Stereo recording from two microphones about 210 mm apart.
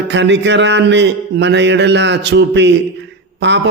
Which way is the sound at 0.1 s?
55° right (ahead or behind).